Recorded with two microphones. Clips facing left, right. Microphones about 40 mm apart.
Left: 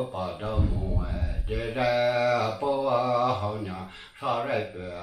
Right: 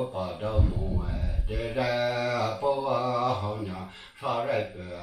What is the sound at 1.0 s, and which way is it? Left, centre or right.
Speech, left.